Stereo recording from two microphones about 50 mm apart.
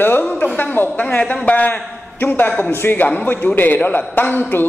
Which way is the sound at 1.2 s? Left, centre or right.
Left.